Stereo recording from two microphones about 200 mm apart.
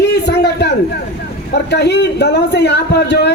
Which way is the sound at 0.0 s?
60° left (ahead or behind).